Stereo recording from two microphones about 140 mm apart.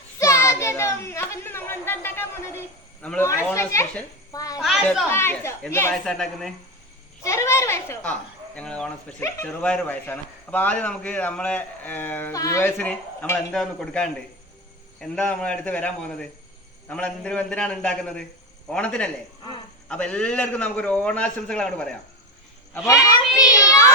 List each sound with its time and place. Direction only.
0.2 s a sound: 20° left (ahead or behind)
3.2 s speech: 20° left (ahead or behind)
4.6 s speech: centre (ahead or behind)
5.1 s speech: 15° left (ahead or behind)
5.9 s speech: 5° left (ahead or behind)
7.3 s a man's voice: 20° left (ahead or behind)
13.5 s speech: 5° left (ahead or behind)
15.1 s a man's voice: 5° left (ahead or behind)
23.5 s child singing: 25° left (ahead or behind)